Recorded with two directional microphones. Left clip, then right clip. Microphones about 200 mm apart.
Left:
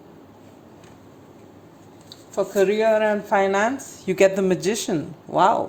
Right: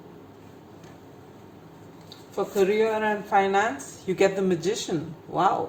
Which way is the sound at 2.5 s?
50° left (ahead or behind).